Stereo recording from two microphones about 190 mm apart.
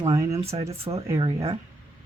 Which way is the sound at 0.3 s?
35° right (ahead or behind).